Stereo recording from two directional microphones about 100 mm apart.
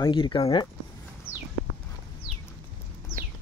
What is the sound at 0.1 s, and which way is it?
Speech, 55° left (ahead or behind).